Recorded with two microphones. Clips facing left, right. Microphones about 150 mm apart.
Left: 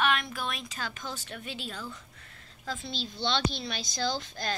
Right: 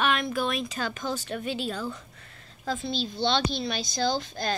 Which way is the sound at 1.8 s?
65° right (ahead or behind).